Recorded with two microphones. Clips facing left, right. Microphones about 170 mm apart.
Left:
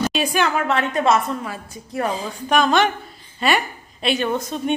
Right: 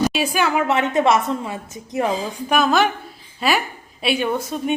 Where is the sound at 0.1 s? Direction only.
5° right (ahead or behind).